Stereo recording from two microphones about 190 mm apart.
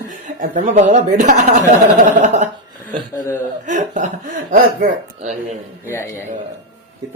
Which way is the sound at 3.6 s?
40° right (ahead or behind).